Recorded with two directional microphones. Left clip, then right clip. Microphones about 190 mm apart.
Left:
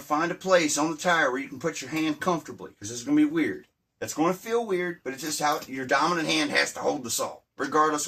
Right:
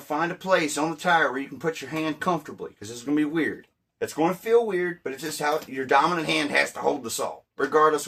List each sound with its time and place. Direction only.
0.1 s speech: 45° right (ahead or behind)